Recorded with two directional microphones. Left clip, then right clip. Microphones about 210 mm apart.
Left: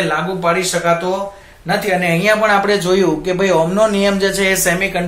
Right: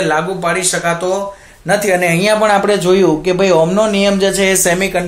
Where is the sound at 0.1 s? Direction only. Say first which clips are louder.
Right 1 dB; 50° right (ahead or behind); by 4.6 s 30° right (ahead or behind).